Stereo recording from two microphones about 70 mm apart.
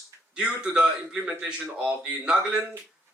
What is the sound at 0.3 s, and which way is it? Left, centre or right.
Speech, centre.